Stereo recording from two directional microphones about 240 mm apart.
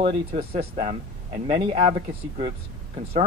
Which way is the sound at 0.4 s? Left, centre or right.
Right.